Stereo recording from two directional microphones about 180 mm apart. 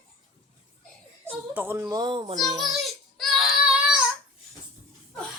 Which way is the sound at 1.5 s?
10° right (ahead or behind).